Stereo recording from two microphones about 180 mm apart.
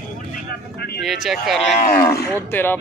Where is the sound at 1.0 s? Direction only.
Centre (ahead or behind).